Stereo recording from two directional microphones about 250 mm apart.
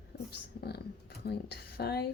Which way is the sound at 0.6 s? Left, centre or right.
Left.